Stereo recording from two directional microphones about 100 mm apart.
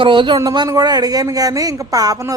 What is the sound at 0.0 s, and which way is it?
Speech, 55° right (ahead or behind).